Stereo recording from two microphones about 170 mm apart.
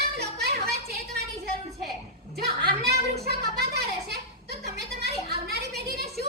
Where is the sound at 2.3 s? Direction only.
70° right (ahead or behind).